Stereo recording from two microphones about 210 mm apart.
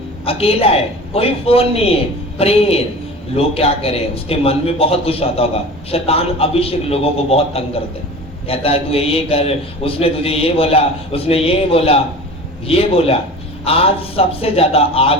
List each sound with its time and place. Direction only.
0.3 s a man's voice: 25° left (ahead or behind)